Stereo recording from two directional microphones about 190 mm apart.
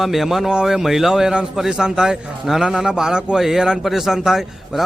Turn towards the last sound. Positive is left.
turn(degrees=0)  # may be behind; listen again after turning